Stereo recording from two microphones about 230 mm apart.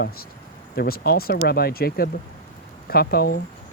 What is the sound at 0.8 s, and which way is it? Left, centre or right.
Speech, left.